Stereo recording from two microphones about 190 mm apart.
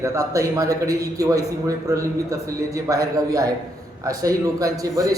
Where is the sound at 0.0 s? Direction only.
15° right (ahead or behind).